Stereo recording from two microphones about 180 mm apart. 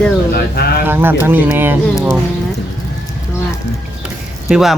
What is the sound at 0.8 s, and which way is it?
Speech, 10° right (ahead or behind).